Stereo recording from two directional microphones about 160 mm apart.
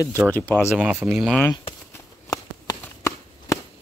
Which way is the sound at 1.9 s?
25° left (ahead or behind).